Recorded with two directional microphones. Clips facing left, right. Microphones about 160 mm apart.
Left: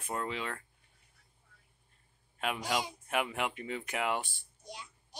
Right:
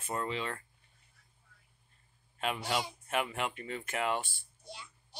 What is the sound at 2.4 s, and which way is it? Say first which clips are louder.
Speech: even; 10° left (ahead or behind).